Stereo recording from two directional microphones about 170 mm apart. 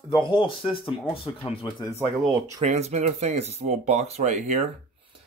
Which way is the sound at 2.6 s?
40° right (ahead or behind).